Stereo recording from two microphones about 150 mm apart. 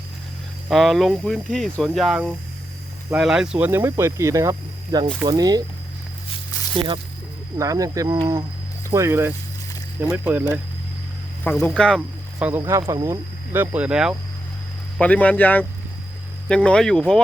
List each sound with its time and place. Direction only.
0.7 s speech: centre (ahead or behind); by 5.6 s 25° right (ahead or behind)
6.7 s speech: 35° right (ahead or behind)
7.6 s speech: 20° right (ahead or behind)
11.4 s speech: 10° left (ahead or behind)
12.4 s speech: 10° right (ahead or behind)
14.9 s speech: 10° left (ahead or behind)